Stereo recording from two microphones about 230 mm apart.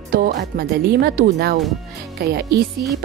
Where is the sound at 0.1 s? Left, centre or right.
Right.